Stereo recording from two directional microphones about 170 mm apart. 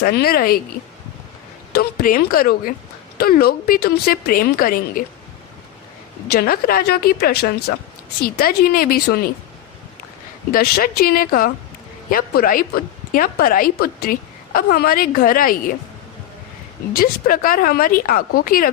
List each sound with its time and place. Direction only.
0.0 s a woman's voice: 65° left (ahead or behind)
1.7 s a woman's voice: 60° left (ahead or behind)
6.2 s a woman's voice: 65° left (ahead or behind)
10.5 s a woman's voice: 60° left (ahead or behind)
16.9 s a woman's voice: 60° left (ahead or behind)